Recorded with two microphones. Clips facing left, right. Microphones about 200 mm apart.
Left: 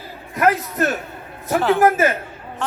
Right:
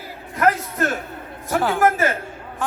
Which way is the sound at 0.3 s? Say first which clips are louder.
Left 2 dB; 20° left (ahead or behind).